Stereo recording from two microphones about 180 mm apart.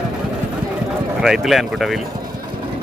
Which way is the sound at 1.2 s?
Centre (ahead or behind).